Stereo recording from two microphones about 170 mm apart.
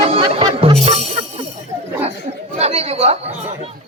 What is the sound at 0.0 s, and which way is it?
Music, 35° right (ahead or behind).